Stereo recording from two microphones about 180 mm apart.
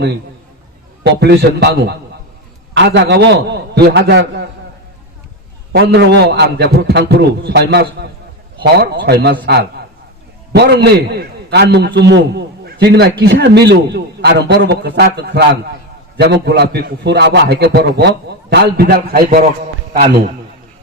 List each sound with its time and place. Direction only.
1.2 s a man's voice: 65° right (ahead or behind)
5.7 s a man's voice: 65° right (ahead or behind)
10.5 s a man's voice: 65° right (ahead or behind); by 20.3 s 45° right (ahead or behind)